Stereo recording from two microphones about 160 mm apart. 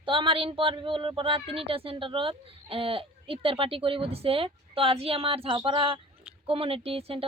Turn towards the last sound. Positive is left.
turn(degrees=-35)  # may be behind; listen again after turning